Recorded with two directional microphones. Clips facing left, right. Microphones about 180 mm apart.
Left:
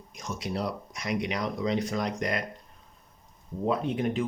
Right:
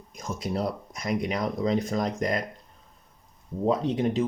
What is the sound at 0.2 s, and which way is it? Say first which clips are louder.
Speech: right 3 dB; 50° right (ahead or behind).